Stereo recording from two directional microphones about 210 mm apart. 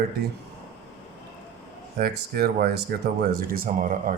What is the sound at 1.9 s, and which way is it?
Speech, 45° right (ahead or behind).